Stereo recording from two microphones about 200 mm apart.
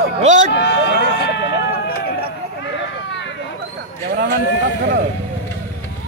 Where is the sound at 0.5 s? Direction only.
60° left (ahead or behind).